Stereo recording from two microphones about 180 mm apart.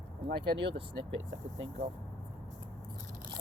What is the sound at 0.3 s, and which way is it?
Speech, 70° right (ahead or behind).